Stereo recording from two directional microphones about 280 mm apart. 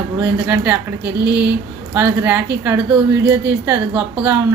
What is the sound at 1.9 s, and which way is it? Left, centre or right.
Speech, centre.